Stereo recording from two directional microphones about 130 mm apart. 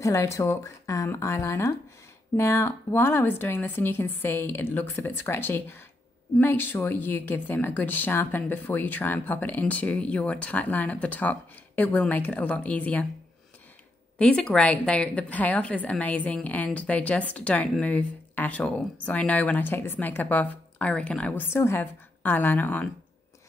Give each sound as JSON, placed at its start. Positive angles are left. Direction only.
{"t": 0.0, "sound": "a woman's voice", "side_deg": 20}
{"t": 14.1, "sound": "a woman's voice", "side_deg": 5}